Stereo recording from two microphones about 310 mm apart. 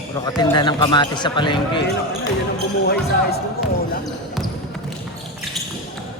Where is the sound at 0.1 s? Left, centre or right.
Centre.